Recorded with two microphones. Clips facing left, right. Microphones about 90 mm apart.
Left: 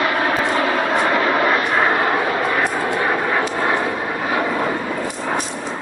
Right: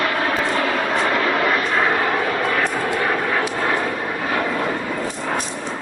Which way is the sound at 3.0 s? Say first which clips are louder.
Left 2 dB; 15° left (ahead or behind).